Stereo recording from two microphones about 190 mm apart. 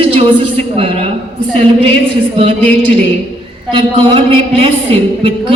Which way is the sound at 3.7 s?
30° right (ahead or behind).